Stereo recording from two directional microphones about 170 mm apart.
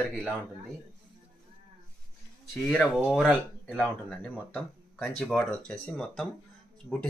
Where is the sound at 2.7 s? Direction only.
5° left (ahead or behind).